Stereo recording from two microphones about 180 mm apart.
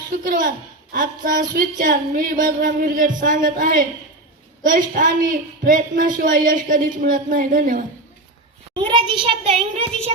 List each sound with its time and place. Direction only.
0.1 s a sound: 50° right (ahead or behind)
0.9 s a man's voice: 50° right (ahead or behind)
8.7 s a child's voice: 25° right (ahead or behind)